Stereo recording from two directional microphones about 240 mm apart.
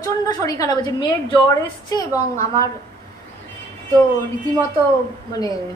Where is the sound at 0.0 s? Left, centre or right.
Centre.